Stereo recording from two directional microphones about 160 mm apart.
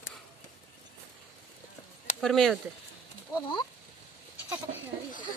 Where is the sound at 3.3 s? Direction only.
30° left (ahead or behind).